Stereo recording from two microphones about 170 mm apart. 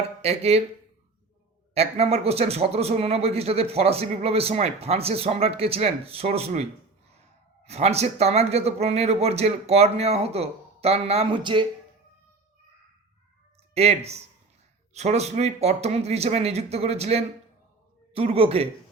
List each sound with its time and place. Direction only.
0.2 s speech: 35° right (ahead or behind)
1.7 s speech: 35° right (ahead or behind)
13.7 s speech: 40° right (ahead or behind)